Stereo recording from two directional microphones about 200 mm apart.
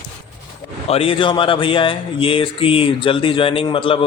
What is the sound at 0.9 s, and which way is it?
Speech, 30° left (ahead or behind).